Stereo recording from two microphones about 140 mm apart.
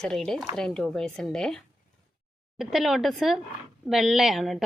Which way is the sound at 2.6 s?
Centre (ahead or behind).